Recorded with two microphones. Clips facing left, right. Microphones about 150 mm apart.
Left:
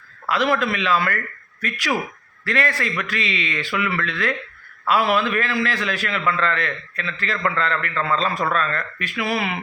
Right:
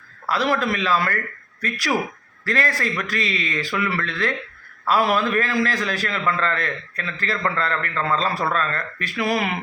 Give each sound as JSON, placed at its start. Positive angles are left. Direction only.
{"t": 0.3, "sound": "a man's voice", "side_deg": -35}